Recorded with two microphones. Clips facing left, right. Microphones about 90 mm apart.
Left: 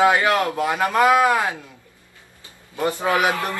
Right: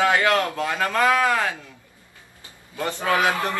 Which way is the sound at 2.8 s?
15° left (ahead or behind).